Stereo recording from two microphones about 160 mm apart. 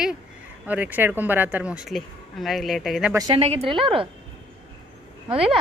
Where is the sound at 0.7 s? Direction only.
10° right (ahead or behind).